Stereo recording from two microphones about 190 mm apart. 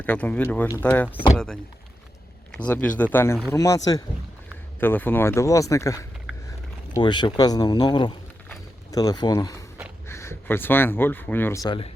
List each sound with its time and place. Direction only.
0.0 s speech: 5° left (ahead or behind)
2.6 s speech: 5° left (ahead or behind)
4.8 s speech: 10° left (ahead or behind)